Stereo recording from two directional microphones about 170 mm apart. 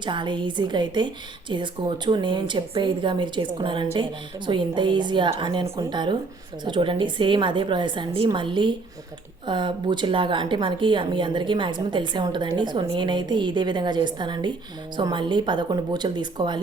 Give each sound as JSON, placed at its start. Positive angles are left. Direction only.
{"t": 0.0, "sound": "a woman's voice", "side_deg": -30}